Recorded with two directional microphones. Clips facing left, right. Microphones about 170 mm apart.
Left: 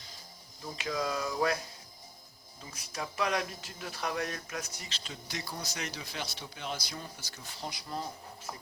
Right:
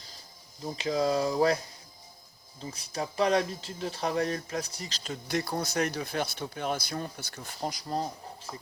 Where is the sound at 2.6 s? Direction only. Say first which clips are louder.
Right 6 dB; 30° right (ahead or behind).